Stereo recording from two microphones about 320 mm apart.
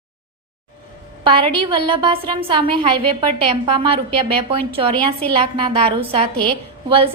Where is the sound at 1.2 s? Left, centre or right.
Centre.